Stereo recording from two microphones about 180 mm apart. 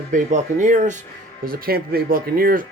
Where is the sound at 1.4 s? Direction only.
55° right (ahead or behind).